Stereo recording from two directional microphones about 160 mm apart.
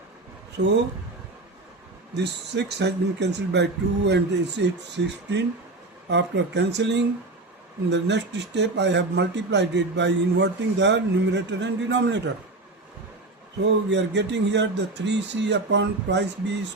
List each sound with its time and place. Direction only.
0.6 s a man's voice: 90° right
2.1 s a man's voice: 90° right
13.9 s a man's voice: 90° right